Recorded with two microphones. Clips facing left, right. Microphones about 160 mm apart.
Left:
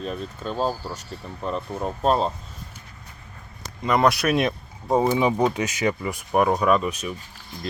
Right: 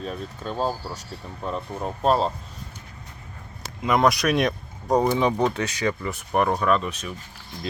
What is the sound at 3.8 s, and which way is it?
Speech, centre (ahead or behind).